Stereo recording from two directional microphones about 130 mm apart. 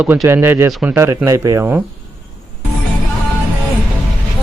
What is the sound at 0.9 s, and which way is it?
Speech, 20° right (ahead or behind).